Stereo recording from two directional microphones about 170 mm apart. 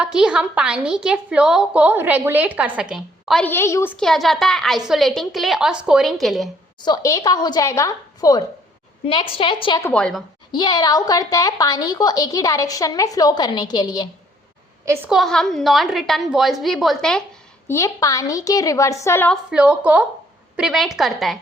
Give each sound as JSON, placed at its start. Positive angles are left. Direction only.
{"t": 0.0, "sound": "a woman's voice", "side_deg": -5}
{"t": 3.4, "sound": "a woman's voice", "side_deg": 15}
{"t": 3.9, "sound": "a woman's voice", "side_deg": 0}
{"t": 6.8, "sound": "a woman's voice", "side_deg": 20}
{"t": 9.0, "sound": "a woman's voice", "side_deg": 30}
{"t": 9.8, "sound": "a woman's voice", "side_deg": 5}
{"t": 10.5, "sound": "a woman's voice", "side_deg": 25}
{"t": 15.1, "sound": "a woman's voice", "side_deg": 0}
{"t": 17.7, "sound": "a woman's voice", "side_deg": 20}
{"t": 19.3, "sound": "a woman's voice", "side_deg": -5}